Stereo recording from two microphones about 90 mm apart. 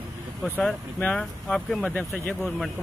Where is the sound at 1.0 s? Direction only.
15° left (ahead or behind).